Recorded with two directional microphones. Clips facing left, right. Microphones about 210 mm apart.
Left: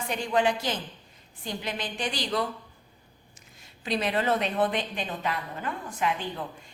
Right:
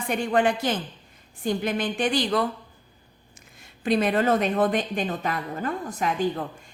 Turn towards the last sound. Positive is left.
turn(degrees=-40)  # may be behind; listen again after turning